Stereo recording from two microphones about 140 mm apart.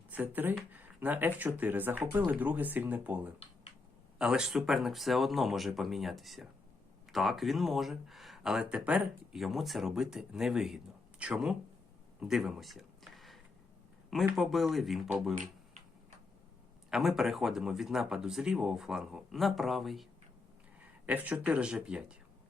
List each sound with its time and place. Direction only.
0.1 s speech: 15° right (ahead or behind)
4.2 s speech: 5° right (ahead or behind)
12.2 s a sound: 5° right (ahead or behind)
14.3 s speech: centre (ahead or behind)
15.4 s tick-tock: 60° right (ahead or behind)
16.9 s speech: centre (ahead or behind)
21.1 s speech: 10° right (ahead or behind)